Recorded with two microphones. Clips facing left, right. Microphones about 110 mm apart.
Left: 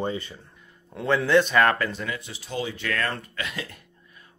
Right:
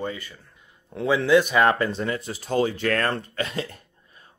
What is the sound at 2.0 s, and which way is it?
Speech, 40° right (ahead or behind).